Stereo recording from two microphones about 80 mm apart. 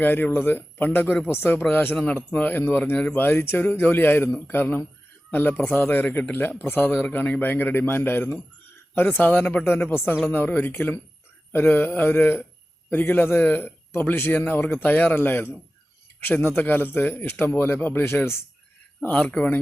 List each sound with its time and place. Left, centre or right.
0.0 s a man's voice: left
3.2 s a man's voice: left
19.0 s a man's voice: centre